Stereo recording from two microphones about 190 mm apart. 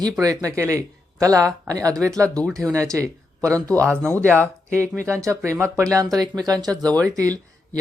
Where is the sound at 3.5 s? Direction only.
5° left (ahead or behind).